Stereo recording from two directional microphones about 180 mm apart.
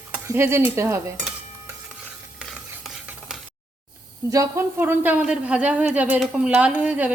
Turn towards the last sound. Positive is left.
turn(degrees=-10)  # may be behind; listen again after turning